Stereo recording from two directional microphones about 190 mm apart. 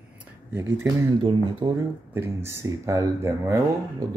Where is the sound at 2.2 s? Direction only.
15° right (ahead or behind).